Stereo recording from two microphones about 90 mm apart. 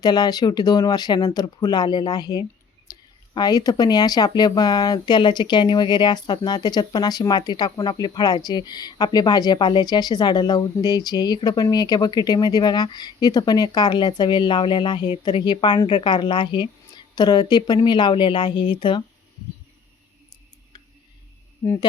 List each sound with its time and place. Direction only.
0.0 s a woman's voice: 50° left (ahead or behind); by 19.0 s 65° left (ahead or behind)